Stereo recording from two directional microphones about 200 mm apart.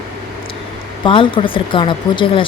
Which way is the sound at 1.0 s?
25° left (ahead or behind).